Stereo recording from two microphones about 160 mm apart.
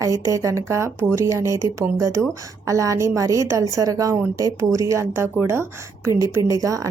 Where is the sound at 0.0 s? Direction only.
20° right (ahead or behind).